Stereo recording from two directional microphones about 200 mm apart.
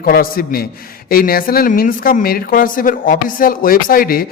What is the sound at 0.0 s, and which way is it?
A woman's voice, 45° left (ahead or behind).